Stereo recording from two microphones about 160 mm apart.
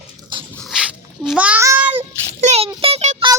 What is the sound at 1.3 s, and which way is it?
Child singing, 10° right (ahead or behind).